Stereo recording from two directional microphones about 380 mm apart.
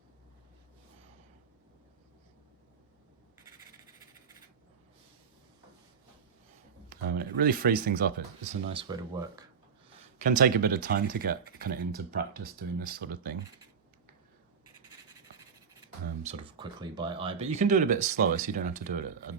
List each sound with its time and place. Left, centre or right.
6.9 s speech: right
8.7 s speech: centre
10.2 s speech: right
16.2 s speech: centre